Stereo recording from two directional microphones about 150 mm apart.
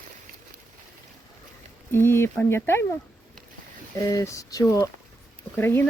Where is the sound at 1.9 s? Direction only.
15° left (ahead or behind).